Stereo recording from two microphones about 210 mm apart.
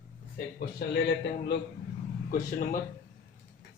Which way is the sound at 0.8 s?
55° left (ahead or behind).